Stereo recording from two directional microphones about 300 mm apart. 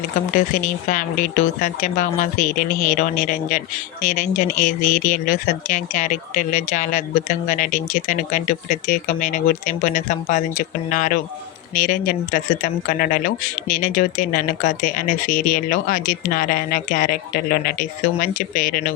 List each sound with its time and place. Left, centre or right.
0.3 s speech: left